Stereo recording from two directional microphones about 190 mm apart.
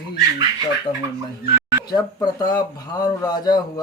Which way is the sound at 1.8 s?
20° left (ahead or behind).